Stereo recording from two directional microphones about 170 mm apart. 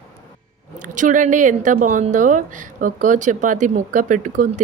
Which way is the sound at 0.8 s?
50° right (ahead or behind).